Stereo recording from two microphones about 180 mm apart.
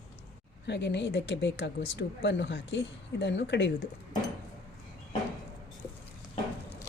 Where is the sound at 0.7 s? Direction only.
70° left (ahead or behind).